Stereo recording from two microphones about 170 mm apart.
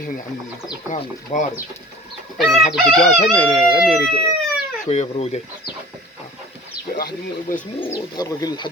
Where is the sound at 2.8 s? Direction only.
Centre (ahead or behind).